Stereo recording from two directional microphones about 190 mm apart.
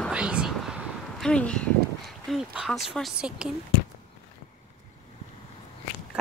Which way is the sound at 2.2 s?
Centre (ahead or behind).